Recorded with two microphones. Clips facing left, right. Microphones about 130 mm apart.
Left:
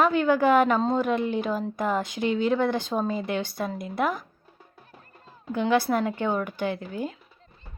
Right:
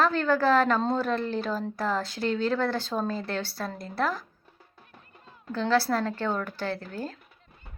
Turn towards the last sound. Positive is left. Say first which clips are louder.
# left 3 dB
turn(degrees=15)  # may be behind; listen again after turning